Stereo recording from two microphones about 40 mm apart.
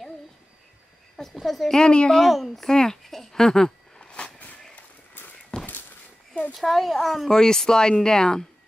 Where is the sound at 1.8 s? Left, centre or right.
Left.